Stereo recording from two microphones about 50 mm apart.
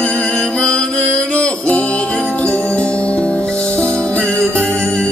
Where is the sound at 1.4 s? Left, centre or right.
Left.